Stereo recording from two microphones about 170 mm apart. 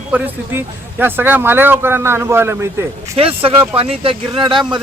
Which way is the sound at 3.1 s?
35° right (ahead or behind).